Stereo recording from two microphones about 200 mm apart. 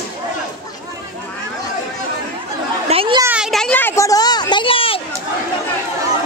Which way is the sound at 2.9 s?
25° right (ahead or behind).